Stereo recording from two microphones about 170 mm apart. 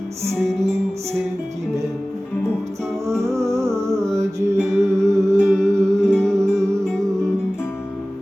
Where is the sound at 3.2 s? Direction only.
15° right (ahead or behind).